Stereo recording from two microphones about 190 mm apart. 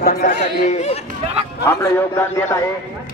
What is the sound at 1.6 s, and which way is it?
A man's voice, 15° left (ahead or behind).